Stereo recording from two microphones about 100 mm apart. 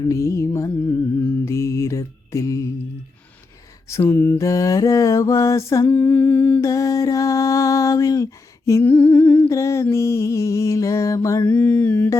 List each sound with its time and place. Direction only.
0.0 s music: 30° left (ahead or behind)
1.5 s mantra: 30° left (ahead or behind)
4.0 s music: 20° left (ahead or behind)
4.4 s mantra: 35° left (ahead or behind)
5.9 s a sound: 15° left (ahead or behind)
6.6 s a sound: 35° left (ahead or behind)
8.8 s humming: 15° left (ahead or behind)
9.5 s music: 30° left (ahead or behind)
11.4 s mantra: 15° left (ahead or behind)